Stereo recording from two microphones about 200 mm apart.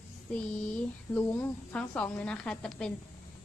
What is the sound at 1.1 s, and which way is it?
Speech, 10° left (ahead or behind).